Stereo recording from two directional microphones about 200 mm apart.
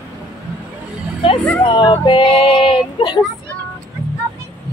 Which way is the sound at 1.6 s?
25° left (ahead or behind).